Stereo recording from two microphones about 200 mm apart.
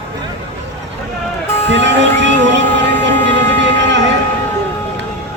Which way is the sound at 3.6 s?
65° right (ahead or behind).